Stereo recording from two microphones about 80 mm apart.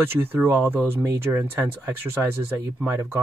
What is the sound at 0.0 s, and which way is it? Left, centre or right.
Speech, right.